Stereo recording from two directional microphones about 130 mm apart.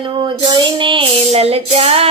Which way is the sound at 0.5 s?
40° right (ahead or behind).